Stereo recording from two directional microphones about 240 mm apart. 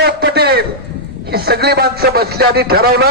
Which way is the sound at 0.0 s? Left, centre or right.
Right.